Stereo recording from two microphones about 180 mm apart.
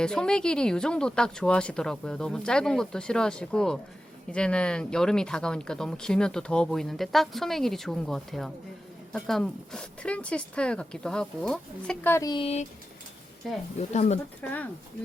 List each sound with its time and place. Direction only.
0.0 s speech: 5° left (ahead or behind)
12.3 s speech: 30° left (ahead or behind)
13.7 s speech: 40° left (ahead or behind)
14.4 s speech: 10° left (ahead or behind)